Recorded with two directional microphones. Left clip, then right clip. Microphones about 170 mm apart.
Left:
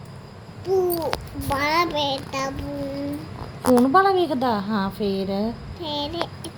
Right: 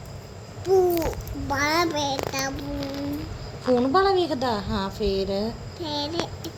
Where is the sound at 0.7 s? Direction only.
35° right (ahead or behind).